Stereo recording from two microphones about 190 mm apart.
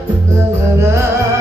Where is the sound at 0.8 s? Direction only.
15° right (ahead or behind).